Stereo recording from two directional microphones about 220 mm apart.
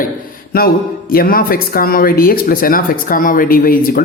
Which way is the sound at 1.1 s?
40° left (ahead or behind).